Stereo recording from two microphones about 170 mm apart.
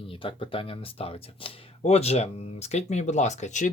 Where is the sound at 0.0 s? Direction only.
30° left (ahead or behind).